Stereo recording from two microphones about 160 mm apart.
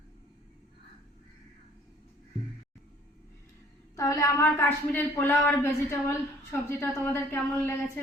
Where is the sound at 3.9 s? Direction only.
20° left (ahead or behind).